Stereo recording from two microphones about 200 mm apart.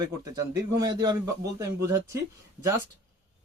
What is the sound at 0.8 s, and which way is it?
Speech, 15° right (ahead or behind).